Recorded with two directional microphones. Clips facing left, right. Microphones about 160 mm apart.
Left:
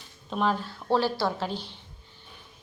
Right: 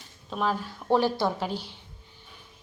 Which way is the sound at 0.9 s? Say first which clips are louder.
Right 2 dB; 15° right (ahead or behind).